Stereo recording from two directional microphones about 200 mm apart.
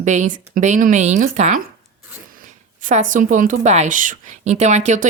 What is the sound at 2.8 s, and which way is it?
A woman's voice, 40° right (ahead or behind).